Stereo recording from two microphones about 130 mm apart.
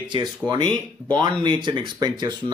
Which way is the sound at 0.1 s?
35° right (ahead or behind).